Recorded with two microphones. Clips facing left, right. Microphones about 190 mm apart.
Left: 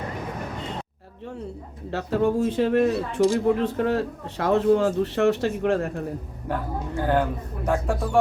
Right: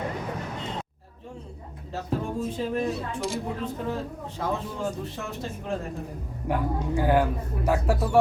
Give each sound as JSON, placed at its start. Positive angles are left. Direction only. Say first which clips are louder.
{"t": 1.9, "sound": "speech", "louder": "left 7 dB", "side_deg": 75}
{"t": 6.5, "sound": "speech", "louder": "right 2 dB", "side_deg": -10}